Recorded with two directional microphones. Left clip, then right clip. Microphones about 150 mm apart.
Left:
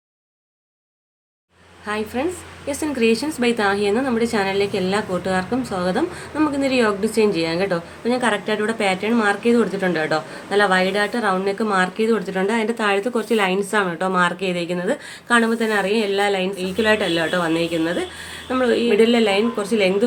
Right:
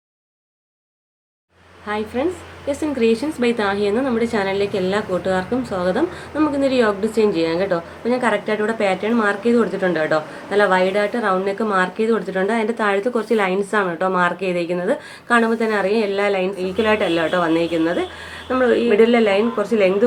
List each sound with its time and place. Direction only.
1.9 s a woman's voice: 30° left (ahead or behind)